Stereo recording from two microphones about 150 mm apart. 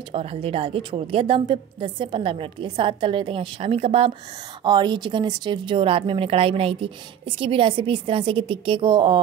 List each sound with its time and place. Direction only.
0.1 s a woman's voice: 40° right (ahead or behind)